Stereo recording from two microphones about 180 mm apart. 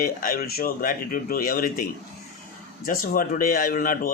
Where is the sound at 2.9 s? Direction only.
50° left (ahead or behind).